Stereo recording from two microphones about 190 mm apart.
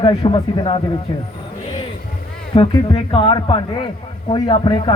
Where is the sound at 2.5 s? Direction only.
25° left (ahead or behind).